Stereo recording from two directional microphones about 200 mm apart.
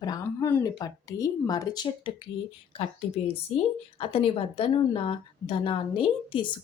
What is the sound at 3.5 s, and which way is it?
Speech, 30° left (ahead or behind).